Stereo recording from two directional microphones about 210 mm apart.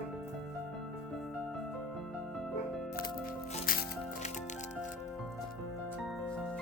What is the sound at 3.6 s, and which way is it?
Music, 45° left (ahead or behind).